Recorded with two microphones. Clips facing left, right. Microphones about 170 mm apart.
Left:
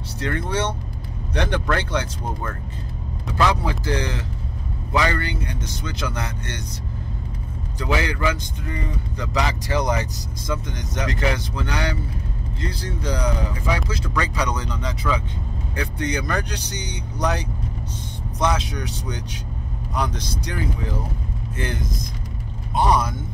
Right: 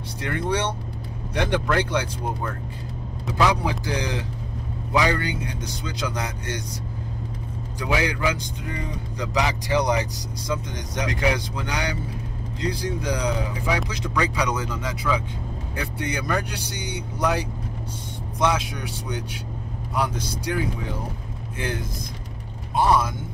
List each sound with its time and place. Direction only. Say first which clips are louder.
0.2 s speech: left 1 dB; 15° right (ahead or behind)
7.8 s speech: left 1 dB; 15° right (ahead or behind)
22.8 s speech: even; 15° left (ahead or behind)